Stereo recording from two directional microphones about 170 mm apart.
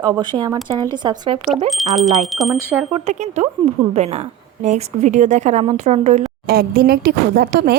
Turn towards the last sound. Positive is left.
turn(degrees=-65)  # may be behind; listen again after turning